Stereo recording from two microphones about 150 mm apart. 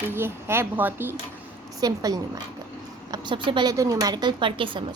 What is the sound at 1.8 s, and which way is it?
Speech, 25° right (ahead or behind).